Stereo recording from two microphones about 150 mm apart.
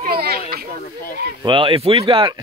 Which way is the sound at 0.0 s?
90° right.